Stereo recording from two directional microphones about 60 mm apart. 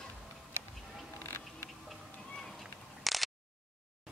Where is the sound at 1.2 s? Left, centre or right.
Left.